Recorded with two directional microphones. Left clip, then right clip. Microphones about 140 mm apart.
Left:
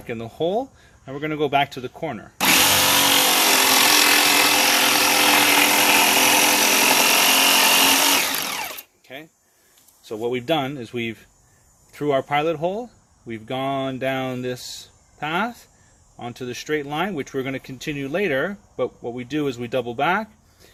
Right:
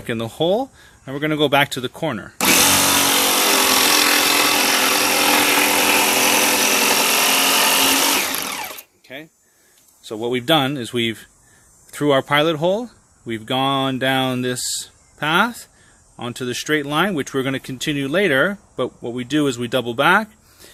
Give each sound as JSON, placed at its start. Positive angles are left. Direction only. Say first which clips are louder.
{"t": 0.0, "sound": "speech", "louder": "right 4 dB", "side_deg": -90}
{"t": 2.4, "sound": "power tool", "louder": "right 1 dB", "side_deg": 0}
{"t": 3.9, "sound": "tools", "louder": "even", "side_deg": -10}
{"t": 4.9, "sound": "tools", "louder": "even", "side_deg": 5}
{"t": 5.3, "sound": "tools", "louder": "right 1 dB", "side_deg": -5}
{"t": 5.8, "sound": "a sound", "louder": "even", "side_deg": 0}
{"t": 9.1, "sound": "a sound", "louder": "right 3 dB", "side_deg": -45}
{"t": 10.0, "sound": "speech", "louder": "right 2 dB", "side_deg": -60}
{"t": 16.1, "sound": "speech", "louder": "right 5 dB", "side_deg": -90}